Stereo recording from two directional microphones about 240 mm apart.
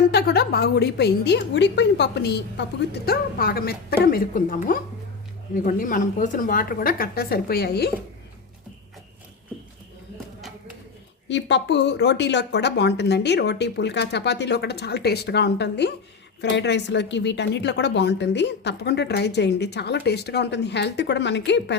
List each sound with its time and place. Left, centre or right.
0.1 s a woman's voice: left
11.3 s speech: left